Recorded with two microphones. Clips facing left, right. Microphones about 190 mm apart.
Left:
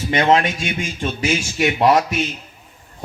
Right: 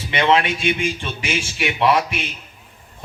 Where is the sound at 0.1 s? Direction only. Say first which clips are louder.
Left 1 dB; 45° left (ahead or behind).